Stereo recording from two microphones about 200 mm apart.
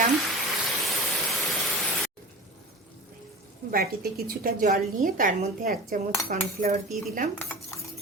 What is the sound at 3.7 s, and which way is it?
A woman's voice, 45° right (ahead or behind).